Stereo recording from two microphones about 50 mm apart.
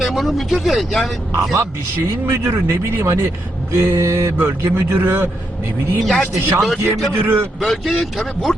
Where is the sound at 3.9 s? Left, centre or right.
Right.